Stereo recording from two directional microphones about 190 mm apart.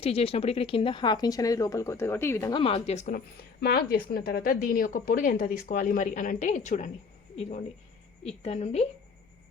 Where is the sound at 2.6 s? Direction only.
30° left (ahead or behind).